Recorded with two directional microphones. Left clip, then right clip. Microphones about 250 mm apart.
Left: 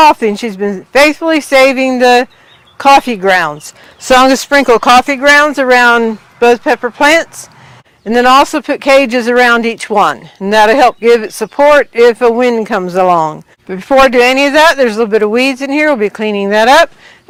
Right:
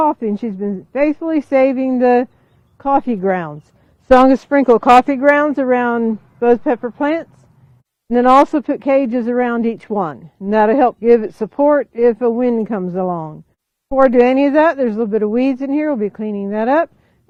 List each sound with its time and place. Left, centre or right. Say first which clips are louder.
0.1 s speech: left 10 dB; centre
14.0 s speech: left 3 dB; centre